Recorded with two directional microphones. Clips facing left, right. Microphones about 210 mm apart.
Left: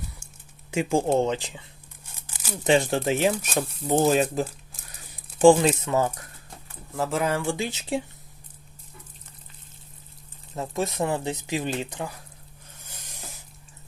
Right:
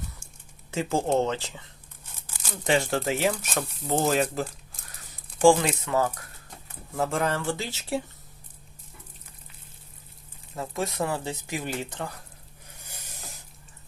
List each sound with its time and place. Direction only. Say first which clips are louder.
0.7 s speech: left 2 dB; 15° left (ahead or behind)
2.3 s crumpling: left 3 dB; 5° left (ahead or behind)
2.6 s speech: left 3 dB; 20° left (ahead or behind)
6.9 s speech: left 1 dB; centre (ahead or behind); by 8.0 s 15° left (ahead or behind)
10.5 s speech: left 3 dB; 20° left (ahead or behind)
12.8 s a sound: left 1 dB; 10° right (ahead or behind)